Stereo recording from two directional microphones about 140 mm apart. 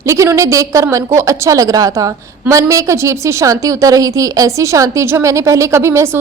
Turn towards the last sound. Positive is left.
turn(degrees=-20)  # may be behind; listen again after turning